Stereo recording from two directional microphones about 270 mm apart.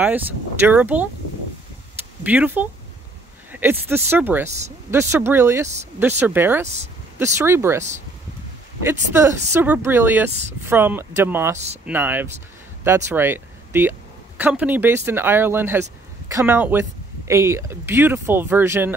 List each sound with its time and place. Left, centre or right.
0.0 s speech: centre
2.2 s speech: centre
3.8 s speech: centre
8.8 s speech: centre
11.5 s speech: right
11.8 s speech: centre